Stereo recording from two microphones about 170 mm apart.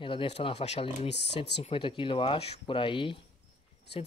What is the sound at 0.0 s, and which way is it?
Speech, 30° left (ahead or behind).